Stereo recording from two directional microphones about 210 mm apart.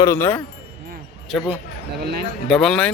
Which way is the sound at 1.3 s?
5° right (ahead or behind).